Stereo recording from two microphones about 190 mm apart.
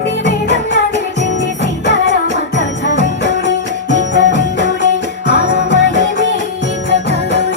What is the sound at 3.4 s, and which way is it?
Music, 70° right (ahead or behind).